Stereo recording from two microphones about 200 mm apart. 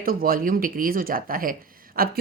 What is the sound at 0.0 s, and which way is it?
Speech, 45° right (ahead or behind).